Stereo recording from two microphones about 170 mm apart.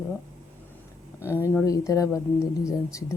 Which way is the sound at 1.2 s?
15° left (ahead or behind).